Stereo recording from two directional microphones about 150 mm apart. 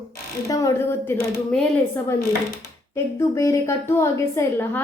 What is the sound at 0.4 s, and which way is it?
A woman's voice, 20° left (ahead or behind).